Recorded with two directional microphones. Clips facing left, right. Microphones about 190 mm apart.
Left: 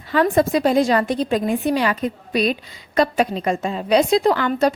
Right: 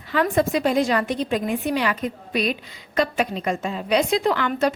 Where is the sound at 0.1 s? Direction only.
35° left (ahead or behind).